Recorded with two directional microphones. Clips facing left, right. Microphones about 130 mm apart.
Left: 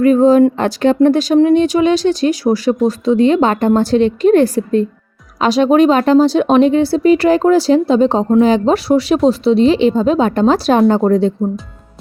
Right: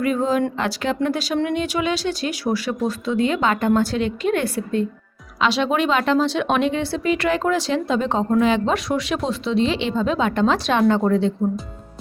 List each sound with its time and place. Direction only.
0.0 s speech: 40° left (ahead or behind)